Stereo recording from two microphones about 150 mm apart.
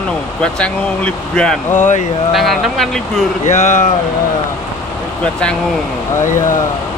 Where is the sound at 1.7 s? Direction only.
55° left (ahead or behind).